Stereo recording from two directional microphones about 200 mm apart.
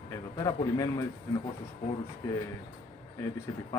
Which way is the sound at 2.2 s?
15° left (ahead or behind).